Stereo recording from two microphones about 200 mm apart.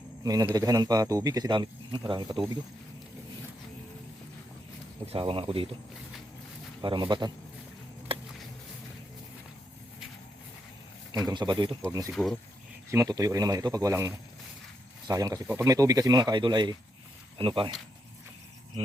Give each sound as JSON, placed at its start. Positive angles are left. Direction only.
{"t": 0.2, "sound": "speech", "side_deg": -20}
{"t": 5.0, "sound": "speech", "side_deg": -25}
{"t": 6.8, "sound": "speech", "side_deg": -25}
{"t": 11.3, "sound": "speech", "side_deg": -20}
{"t": 12.1, "sound": "speech", "side_deg": 0}
{"t": 12.9, "sound": "speech", "side_deg": -15}